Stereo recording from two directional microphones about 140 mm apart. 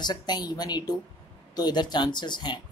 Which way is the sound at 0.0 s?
30° left (ahead or behind).